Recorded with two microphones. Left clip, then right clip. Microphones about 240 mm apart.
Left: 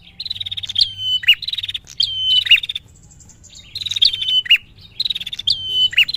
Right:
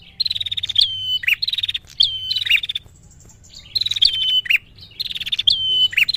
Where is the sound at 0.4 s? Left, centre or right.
Centre.